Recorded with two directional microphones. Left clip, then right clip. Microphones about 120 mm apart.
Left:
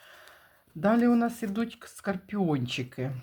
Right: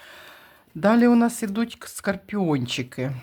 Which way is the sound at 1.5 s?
40° right (ahead or behind).